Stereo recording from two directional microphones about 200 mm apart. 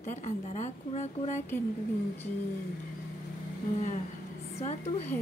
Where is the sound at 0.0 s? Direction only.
40° left (ahead or behind).